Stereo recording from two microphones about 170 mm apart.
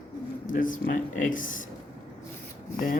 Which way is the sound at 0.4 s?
50° left (ahead or behind).